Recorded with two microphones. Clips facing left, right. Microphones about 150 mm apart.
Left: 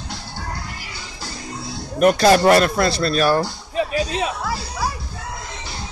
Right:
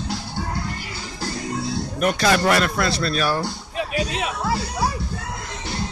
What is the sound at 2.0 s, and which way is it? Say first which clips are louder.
Speech: left 6 dB; 40° left (ahead or behind).